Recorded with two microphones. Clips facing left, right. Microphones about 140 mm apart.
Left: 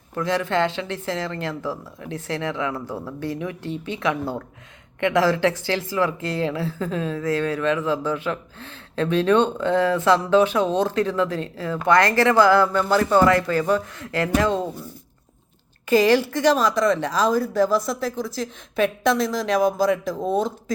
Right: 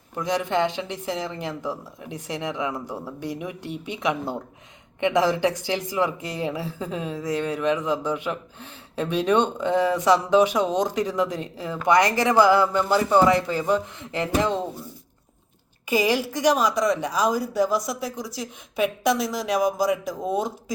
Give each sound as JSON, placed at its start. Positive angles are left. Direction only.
{"t": 0.2, "sound": "speech", "side_deg": -15}
{"t": 15.9, "sound": "speech", "side_deg": -10}